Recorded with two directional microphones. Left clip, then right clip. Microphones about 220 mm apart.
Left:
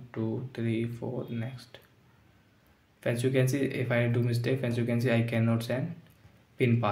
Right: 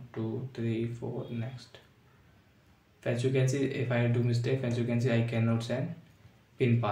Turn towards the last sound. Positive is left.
turn(degrees=25)  # may be behind; listen again after turning